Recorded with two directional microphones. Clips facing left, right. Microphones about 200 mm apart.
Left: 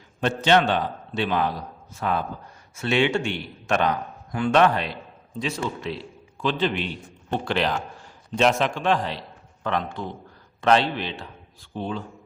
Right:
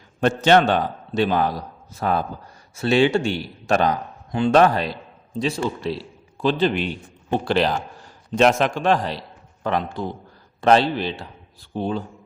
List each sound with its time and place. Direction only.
0.2 s a man's voice: 45° right (ahead or behind)
8.4 s a man's voice: 45° right (ahead or behind)